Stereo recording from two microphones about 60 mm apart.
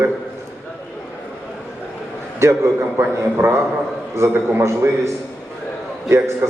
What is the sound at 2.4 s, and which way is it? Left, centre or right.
Speech, right.